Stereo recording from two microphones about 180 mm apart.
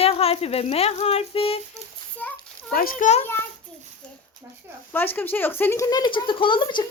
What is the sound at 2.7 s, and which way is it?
Speech, 55° left (ahead or behind).